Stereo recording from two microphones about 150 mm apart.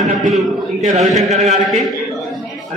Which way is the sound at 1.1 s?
45° right (ahead or behind).